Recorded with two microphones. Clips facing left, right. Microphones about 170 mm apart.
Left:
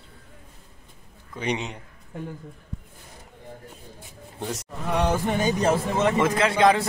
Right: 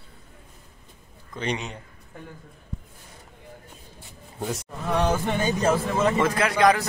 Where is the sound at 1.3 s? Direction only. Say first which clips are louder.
Left 1 dB; 15° left (ahead or behind).